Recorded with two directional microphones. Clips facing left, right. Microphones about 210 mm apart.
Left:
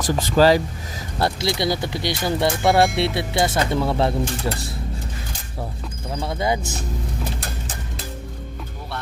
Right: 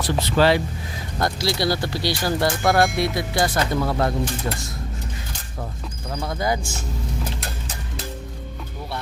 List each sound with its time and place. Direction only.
0.3 s speech: 40° left (ahead or behind)
1.2 s speech: 20° left (ahead or behind)
2.6 s speech: centre (ahead or behind)
3.0 s speech: 25° left (ahead or behind)
6.1 s speech: 25° left (ahead or behind)